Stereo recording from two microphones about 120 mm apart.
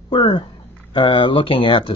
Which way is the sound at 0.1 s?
45° left (ahead or behind).